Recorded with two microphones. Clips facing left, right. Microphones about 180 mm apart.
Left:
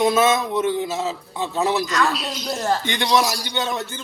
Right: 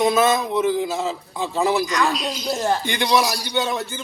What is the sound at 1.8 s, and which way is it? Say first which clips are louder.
Speech: even; 15° right (ahead or behind).